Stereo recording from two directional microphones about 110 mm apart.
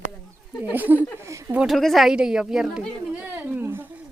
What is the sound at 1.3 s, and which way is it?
Speech, 25° right (ahead or behind).